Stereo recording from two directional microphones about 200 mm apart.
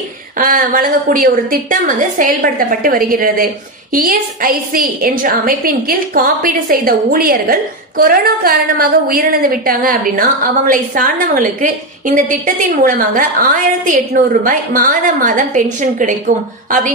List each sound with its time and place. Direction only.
0.4 s a woman's voice: 45° right (ahead or behind)